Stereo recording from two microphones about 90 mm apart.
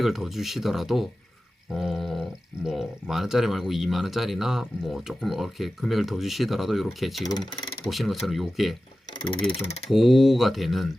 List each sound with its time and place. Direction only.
0.0 s speech: centre (ahead or behind)
7.3 s speech: 55° left (ahead or behind)
7.9 s speech: centre (ahead or behind)
9.9 s speech: centre (ahead or behind)